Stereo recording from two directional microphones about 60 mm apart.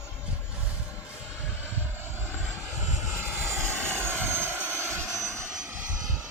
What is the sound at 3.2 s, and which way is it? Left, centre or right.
Vehicle, right.